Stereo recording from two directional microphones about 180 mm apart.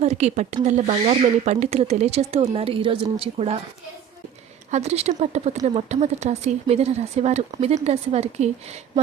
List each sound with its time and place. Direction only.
0.0 s speech: 35° right (ahead or behind)
4.7 s speech: 35° right (ahead or behind)